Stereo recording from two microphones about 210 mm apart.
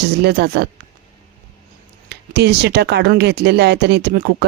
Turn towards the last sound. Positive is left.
turn(degrees=-45)  # may be behind; listen again after turning